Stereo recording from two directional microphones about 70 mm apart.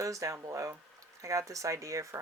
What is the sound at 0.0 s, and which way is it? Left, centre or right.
Speech, right.